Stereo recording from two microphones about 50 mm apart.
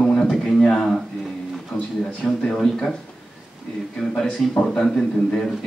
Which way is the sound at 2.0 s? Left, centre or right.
Centre.